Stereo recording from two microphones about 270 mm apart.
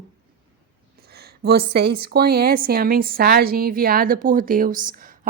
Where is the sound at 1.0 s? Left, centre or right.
Right.